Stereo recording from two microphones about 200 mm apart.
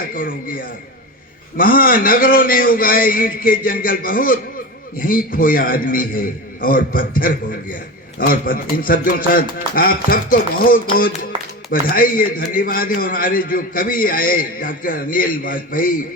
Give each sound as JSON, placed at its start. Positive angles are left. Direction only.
{"t": 0.1, "sound": "a man's voice", "side_deg": 45}